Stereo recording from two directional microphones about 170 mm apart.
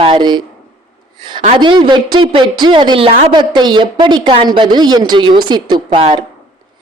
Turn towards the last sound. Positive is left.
turn(degrees=-35)  # may be behind; listen again after turning